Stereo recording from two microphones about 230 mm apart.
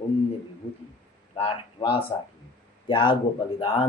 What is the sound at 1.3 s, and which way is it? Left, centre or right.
A man's voice, left.